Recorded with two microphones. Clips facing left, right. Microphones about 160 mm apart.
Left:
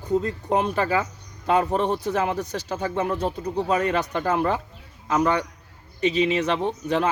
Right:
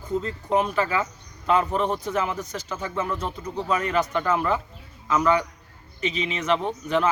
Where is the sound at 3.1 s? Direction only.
35° left (ahead or behind).